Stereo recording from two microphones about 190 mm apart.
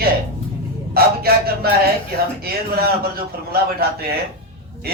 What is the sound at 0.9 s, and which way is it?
A man's voice, 55° right (ahead or behind).